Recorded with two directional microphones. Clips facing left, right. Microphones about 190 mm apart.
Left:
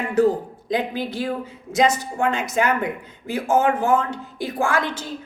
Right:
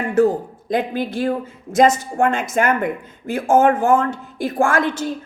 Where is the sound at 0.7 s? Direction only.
50° right (ahead or behind).